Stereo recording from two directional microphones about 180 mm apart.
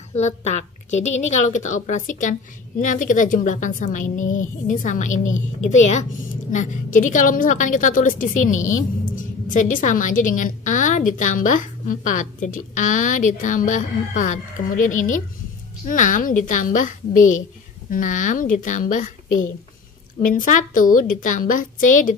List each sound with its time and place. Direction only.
0.1 s a woman's voice: 40° left (ahead or behind)
20.2 s a woman's voice: 50° left (ahead or behind)